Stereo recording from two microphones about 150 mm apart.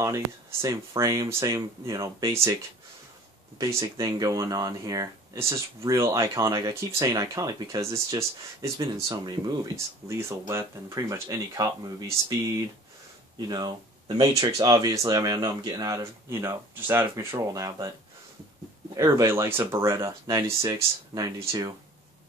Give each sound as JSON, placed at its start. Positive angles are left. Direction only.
{"t": 0.0, "sound": "speech", "side_deg": -20}
{"t": 3.5, "sound": "speech", "side_deg": -20}
{"t": 13.5, "sound": "speech", "side_deg": -30}
{"t": 18.9, "sound": "speech", "side_deg": -20}